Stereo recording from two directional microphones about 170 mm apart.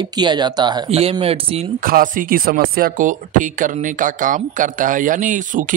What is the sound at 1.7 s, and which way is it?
Speech, 55° right (ahead or behind).